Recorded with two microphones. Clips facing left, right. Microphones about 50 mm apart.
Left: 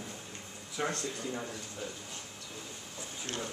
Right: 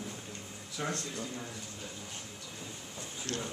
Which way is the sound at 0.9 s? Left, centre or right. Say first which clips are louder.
Left 2 dB; left.